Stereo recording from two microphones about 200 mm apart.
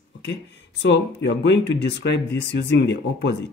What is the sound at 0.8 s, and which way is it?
Speech, 60° left (ahead or behind).